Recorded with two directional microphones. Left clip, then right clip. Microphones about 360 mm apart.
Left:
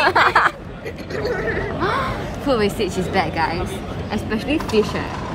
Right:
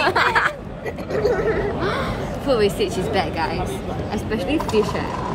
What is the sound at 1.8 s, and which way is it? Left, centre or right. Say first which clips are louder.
A woman's voice: left 2 dB; centre.